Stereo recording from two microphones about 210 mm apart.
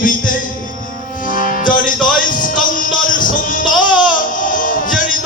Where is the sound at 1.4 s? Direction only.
40° left (ahead or behind).